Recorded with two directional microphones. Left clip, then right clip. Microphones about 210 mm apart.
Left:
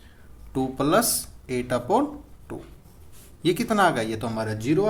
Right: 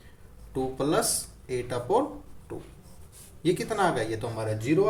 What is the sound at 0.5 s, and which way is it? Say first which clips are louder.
Speech: left 5 dB; 45° left (ahead or behind).